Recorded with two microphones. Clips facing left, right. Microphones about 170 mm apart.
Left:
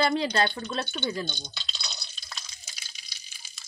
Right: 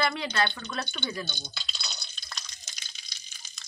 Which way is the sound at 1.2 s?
5° right (ahead or behind).